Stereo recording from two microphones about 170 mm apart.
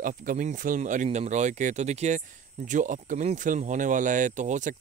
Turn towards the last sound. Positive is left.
turn(degrees=-45)  # may be behind; listen again after turning